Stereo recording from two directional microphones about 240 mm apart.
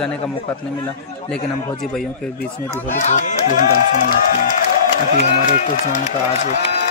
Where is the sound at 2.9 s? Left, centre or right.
Left.